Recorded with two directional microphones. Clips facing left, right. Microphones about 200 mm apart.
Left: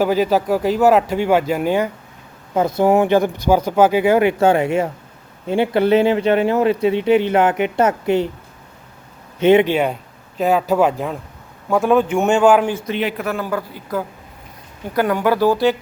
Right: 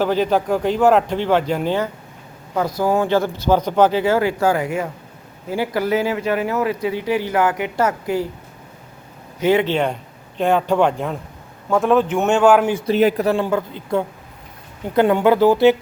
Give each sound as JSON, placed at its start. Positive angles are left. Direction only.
{"t": 0.0, "sound": "speech", "side_deg": 10}
{"t": 2.6, "sound": "speech", "side_deg": 25}
{"t": 9.4, "sound": "speech", "side_deg": 20}
{"t": 9.7, "sound": "speech", "side_deg": 5}
{"t": 12.8, "sound": "speech", "side_deg": -40}